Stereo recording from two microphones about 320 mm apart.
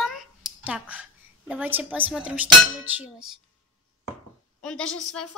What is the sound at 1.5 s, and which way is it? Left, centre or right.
A child's voice, centre.